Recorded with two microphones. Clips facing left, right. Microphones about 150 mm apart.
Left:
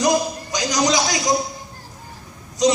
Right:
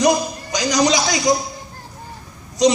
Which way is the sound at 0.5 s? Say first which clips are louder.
Right 3 dB; 70° right (ahead or behind).